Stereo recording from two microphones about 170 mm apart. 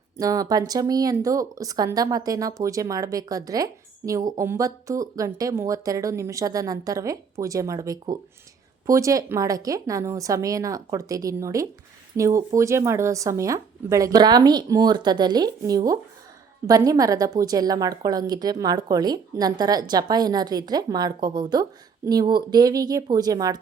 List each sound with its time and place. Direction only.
0.2 s speech: 20° right (ahead or behind)